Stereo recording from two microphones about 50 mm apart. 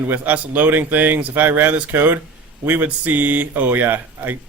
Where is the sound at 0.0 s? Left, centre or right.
Right.